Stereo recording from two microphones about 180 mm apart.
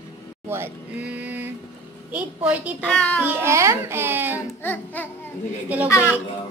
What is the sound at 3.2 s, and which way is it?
Speech, 10° right (ahead or behind).